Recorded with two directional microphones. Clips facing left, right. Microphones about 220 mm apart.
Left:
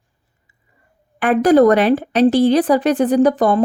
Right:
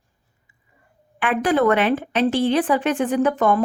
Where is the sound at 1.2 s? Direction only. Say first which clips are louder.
Left 7 dB; 40° left (ahead or behind).